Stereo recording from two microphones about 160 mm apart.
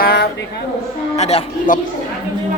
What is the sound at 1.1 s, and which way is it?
Speech, 40° left (ahead or behind).